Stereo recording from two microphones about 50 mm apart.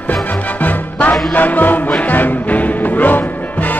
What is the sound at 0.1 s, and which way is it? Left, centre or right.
Music, left.